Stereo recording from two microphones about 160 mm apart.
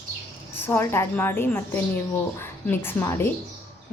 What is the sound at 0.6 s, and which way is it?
Speech, 15° left (ahead or behind).